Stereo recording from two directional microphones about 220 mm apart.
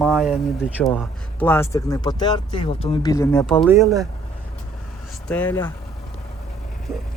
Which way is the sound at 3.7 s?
15° right (ahead or behind).